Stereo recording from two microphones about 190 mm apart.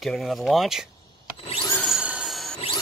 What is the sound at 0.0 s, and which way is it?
Speech, centre (ahead or behind).